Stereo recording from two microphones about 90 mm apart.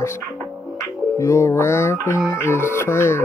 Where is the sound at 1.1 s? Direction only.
30° left (ahead or behind).